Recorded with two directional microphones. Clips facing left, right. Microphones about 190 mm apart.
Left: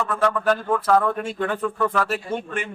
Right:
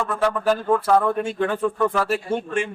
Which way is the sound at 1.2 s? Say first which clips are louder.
Right 3 dB; 20° right (ahead or behind).